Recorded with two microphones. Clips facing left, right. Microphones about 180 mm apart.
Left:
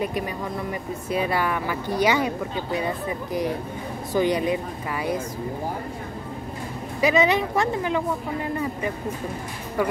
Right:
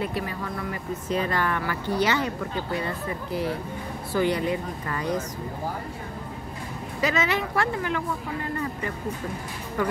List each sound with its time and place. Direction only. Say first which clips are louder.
0.0 s speech: left 2 dB; 15° left (ahead or behind)
7.0 s speech: left 5 dB; 15° left (ahead or behind)